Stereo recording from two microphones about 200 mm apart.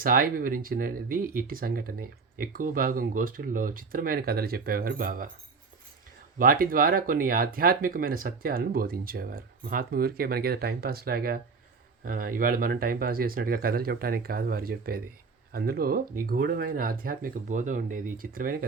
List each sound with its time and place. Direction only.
0.0 s speech: 45° right (ahead or behind)
6.4 s speech: 45° right (ahead or behind)